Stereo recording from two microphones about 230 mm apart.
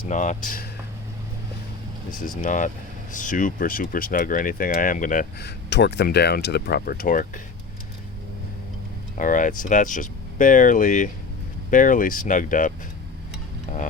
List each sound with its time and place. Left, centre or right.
0.1 s speech: left
2.4 s speech: left
9.1 s speech: left